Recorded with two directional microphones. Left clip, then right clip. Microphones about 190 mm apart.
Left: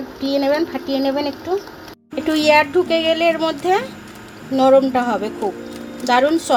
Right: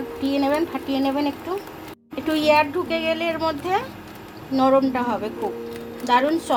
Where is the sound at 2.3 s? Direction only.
55° left (ahead or behind).